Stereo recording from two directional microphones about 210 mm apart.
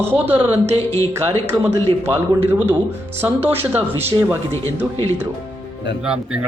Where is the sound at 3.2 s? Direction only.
10° right (ahead or behind).